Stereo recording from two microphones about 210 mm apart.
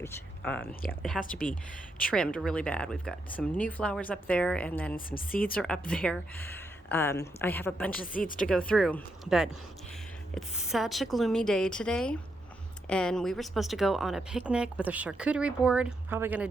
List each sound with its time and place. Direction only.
0.0 s speech: 10° left (ahead or behind)
1.2 s speech: 5° right (ahead or behind)
4.9 s speech: 45° left (ahead or behind)
5.5 s a woman's voice: 5° left (ahead or behind)